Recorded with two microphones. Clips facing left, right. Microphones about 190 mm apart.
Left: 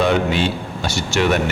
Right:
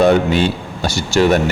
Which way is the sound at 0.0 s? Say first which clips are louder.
Right 5 dB; 45° right (ahead or behind).